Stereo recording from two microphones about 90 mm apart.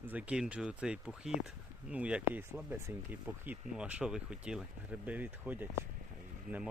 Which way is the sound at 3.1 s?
15° right (ahead or behind).